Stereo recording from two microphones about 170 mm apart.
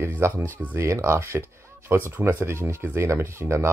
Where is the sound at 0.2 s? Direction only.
15° right (ahead or behind).